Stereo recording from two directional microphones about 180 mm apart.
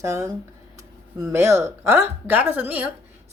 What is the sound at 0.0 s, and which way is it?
Speech, 15° right (ahead or behind).